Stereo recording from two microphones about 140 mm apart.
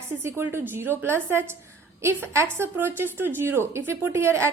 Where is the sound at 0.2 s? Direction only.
20° right (ahead or behind).